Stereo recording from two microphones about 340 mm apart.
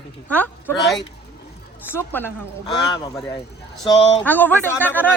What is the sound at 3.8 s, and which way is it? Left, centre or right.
Speech, centre.